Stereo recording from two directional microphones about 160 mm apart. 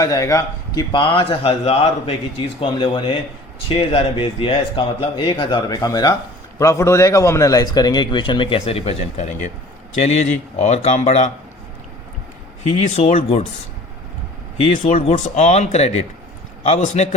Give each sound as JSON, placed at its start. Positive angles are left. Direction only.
{"t": 0.0, "sound": "a man's voice", "side_deg": 20}
{"t": 12.9, "sound": "speech", "side_deg": 45}
{"t": 14.8, "sound": "speech", "side_deg": 45}